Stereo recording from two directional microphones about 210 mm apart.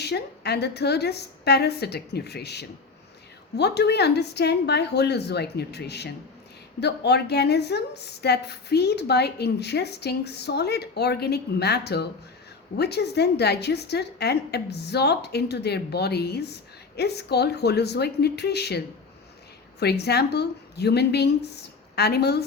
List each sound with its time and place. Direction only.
0.0 s a woman's voice: 50° left (ahead or behind)
19.8 s a woman's voice: 50° left (ahead or behind)